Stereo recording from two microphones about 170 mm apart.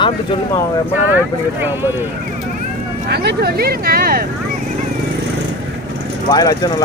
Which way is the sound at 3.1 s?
70° right (ahead or behind).